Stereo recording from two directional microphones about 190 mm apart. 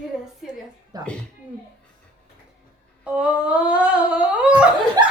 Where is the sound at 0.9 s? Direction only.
20° right (ahead or behind).